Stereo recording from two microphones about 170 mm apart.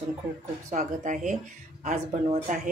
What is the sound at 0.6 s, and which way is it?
Speech, 50° right (ahead or behind).